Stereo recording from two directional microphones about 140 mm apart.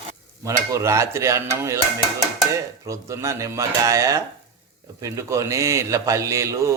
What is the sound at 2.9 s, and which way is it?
A man's voice, 20° right (ahead or behind).